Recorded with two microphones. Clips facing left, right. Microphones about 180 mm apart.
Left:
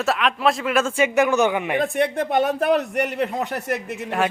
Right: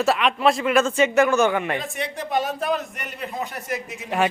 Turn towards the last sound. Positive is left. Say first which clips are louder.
# left 4 dB
turn(degrees=60)  # may be behind; listen again after turning